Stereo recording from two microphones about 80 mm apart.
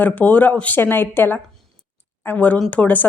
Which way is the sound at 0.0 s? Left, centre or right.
Left.